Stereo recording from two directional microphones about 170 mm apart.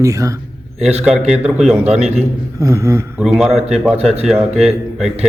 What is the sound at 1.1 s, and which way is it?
Speech, 5° right (ahead or behind).